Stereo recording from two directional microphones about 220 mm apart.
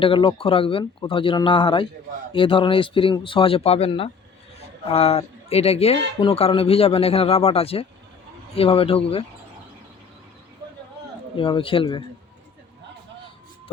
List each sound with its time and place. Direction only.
0.0 s speech: 25° left (ahead or behind)
11.3 s speech: 25° left (ahead or behind)